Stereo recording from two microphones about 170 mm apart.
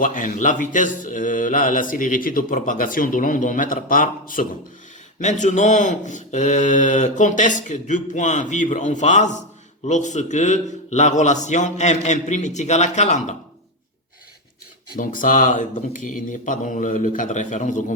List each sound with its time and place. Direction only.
0.0 s mantra: 50° left (ahead or behind)
14.9 s mantra: 50° left (ahead or behind)